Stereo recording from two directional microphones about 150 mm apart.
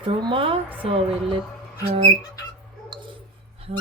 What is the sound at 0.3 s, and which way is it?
Speech, 35° right (ahead or behind).